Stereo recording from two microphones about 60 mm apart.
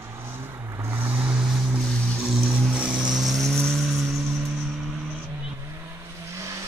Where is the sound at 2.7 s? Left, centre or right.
Centre.